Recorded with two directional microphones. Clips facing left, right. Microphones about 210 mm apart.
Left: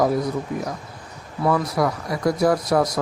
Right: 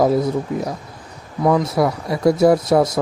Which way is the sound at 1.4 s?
20° right (ahead or behind).